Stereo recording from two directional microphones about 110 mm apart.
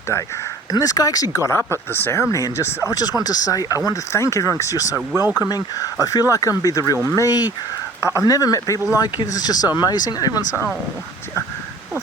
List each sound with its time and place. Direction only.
0.7 s speech: 35° left (ahead or behind)